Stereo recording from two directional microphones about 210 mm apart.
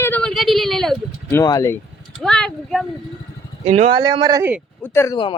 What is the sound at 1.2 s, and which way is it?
Speech, 15° left (ahead or behind).